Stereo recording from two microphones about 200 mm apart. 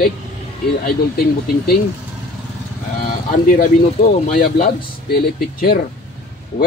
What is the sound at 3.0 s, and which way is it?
Speech, 45° left (ahead or behind).